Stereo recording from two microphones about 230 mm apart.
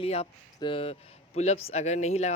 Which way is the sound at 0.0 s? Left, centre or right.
Left.